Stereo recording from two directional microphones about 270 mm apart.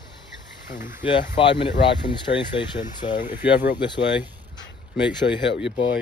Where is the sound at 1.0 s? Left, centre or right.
Centre.